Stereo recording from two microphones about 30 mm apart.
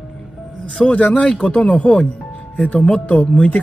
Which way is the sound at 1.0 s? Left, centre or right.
Left.